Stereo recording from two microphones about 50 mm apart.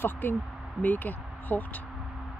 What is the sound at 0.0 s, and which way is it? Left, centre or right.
Speech, left.